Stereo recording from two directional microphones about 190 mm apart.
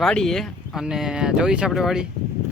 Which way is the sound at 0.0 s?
Centre (ahead or behind).